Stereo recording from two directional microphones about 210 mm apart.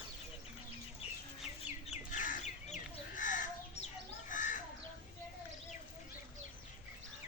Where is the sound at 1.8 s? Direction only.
35° left (ahead or behind).